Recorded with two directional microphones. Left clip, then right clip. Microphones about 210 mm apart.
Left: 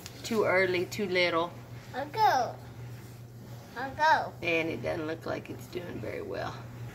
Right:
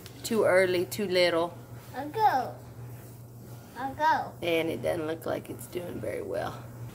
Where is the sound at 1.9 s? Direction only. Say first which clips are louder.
Even; 35° left (ahead or behind).